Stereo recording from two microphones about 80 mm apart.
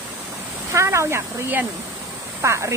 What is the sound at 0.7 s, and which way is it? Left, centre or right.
Speech, right.